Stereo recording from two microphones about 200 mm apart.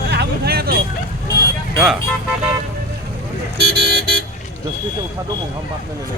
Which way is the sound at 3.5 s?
50° right (ahead or behind).